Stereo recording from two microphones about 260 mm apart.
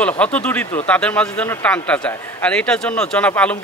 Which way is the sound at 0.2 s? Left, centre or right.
Centre.